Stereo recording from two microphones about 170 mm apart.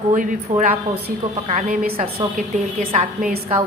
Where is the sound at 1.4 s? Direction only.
50° right (ahead or behind).